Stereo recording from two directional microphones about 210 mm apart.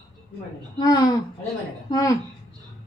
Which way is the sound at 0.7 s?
20° left (ahead or behind).